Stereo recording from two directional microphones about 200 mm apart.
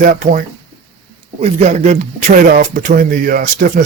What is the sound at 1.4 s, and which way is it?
Speech, 35° right (ahead or behind).